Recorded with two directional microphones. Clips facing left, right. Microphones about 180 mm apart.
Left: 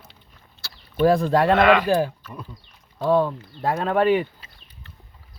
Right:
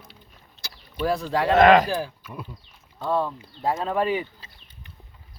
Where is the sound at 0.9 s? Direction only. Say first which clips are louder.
Left 7 dB; 55° left (ahead or behind).